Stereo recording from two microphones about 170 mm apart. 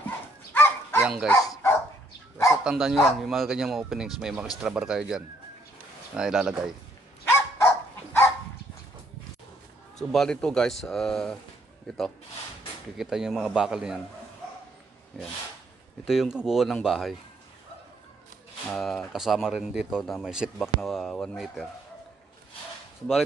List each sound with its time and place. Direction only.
0.5 s dog: 10° left (ahead or behind)
1.0 s speech: 5° right (ahead or behind)
1.4 s dog: 20° left (ahead or behind)
2.5 s speech: 5° right (ahead or behind)
7.2 s dog: 15° left (ahead or behind)
9.9 s speech: 5° left (ahead or behind)
12.9 s speech: 5° right (ahead or behind)
16.1 s speech: centre (ahead or behind)
18.7 s speech: centre (ahead or behind)